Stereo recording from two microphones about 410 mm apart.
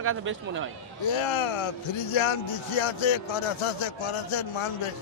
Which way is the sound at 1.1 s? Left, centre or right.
Left.